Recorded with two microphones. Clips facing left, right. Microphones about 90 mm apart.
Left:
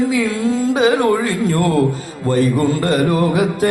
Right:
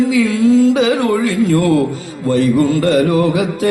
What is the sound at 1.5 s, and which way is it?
Music, 40° left (ahead or behind).